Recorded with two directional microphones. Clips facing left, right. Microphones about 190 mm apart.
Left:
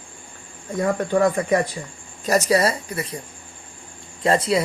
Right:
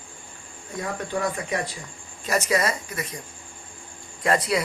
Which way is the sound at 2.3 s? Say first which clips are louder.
Left 5 dB; 35° left (ahead or behind).